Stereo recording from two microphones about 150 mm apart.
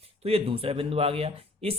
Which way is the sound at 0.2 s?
40° right (ahead or behind).